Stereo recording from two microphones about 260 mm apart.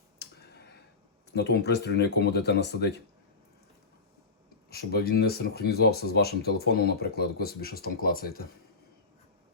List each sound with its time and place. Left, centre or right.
1.3 s speech: left
4.7 s speech: left